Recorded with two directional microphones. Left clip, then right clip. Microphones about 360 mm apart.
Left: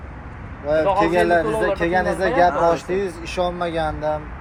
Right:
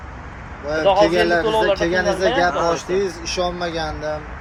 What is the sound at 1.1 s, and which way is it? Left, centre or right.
Speech, centre.